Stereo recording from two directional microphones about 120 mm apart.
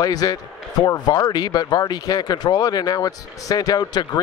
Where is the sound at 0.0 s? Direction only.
30° left (ahead or behind).